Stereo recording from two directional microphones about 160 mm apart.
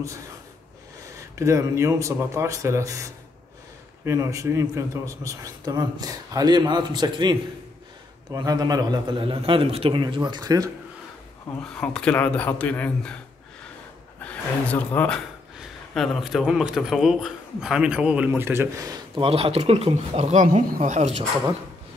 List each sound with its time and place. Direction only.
1.3 s a man's voice: 20° right (ahead or behind)
11.7 s speech: 5° left (ahead or behind)
14.2 s a man's voice: 10° left (ahead or behind); by 21.1 s 50° right (ahead or behind)